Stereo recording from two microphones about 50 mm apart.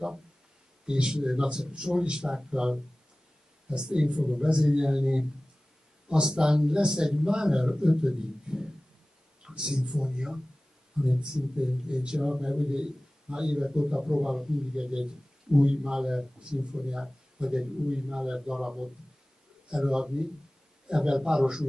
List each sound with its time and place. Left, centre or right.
0.8 s speech: centre